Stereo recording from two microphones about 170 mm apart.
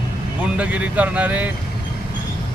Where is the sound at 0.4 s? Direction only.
5° right (ahead or behind).